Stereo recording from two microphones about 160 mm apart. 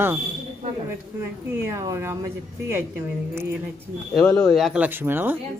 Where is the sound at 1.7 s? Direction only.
15° right (ahead or behind).